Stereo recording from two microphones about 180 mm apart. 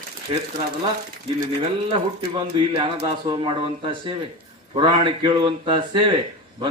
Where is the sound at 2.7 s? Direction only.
30° right (ahead or behind).